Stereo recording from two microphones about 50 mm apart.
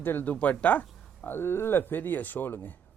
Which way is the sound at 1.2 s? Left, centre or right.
Left.